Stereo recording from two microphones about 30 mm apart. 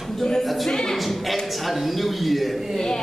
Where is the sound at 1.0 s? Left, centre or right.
Centre.